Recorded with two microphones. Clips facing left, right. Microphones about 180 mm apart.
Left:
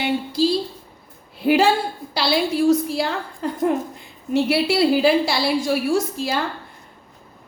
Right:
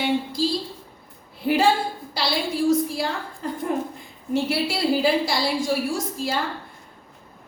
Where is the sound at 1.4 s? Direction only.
80° left.